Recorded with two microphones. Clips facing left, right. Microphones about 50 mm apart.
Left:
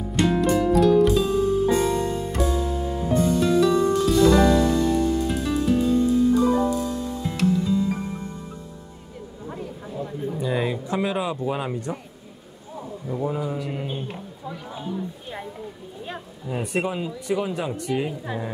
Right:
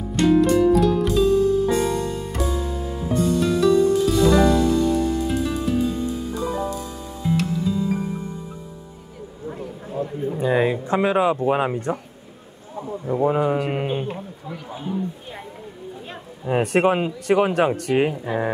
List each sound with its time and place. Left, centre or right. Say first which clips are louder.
0.1 s music: right 4 dB; centre
1.3 s music: right 2 dB; centre
1.8 s music: even; centre
9.8 s a sound: right 5 dB; centre
10.3 s a sound: right 6 dB; right
11.4 s speech: right 6 dB; right
13.0 s speech: right 7 dB; right
13.3 s speech: right 7 dB; right
14.0 s speech: right 3 dB; centre
16.4 s speech: right 8 dB; right